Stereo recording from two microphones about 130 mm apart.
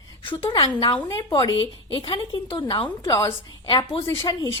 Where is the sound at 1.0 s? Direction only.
25° left (ahead or behind).